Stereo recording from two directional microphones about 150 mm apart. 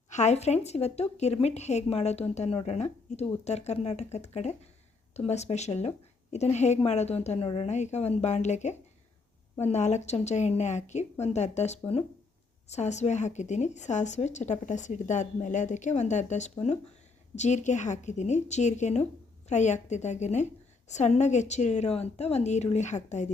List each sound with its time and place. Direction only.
0.1 s a woman's voice: 50° left (ahead or behind)